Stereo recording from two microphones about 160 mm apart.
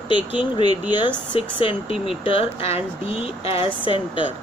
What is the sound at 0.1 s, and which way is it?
Speech, 30° left (ahead or behind).